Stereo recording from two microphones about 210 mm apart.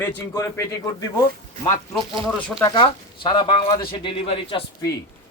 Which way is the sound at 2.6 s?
20° left (ahead or behind).